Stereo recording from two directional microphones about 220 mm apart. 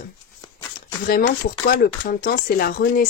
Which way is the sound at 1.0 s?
40° left (ahead or behind).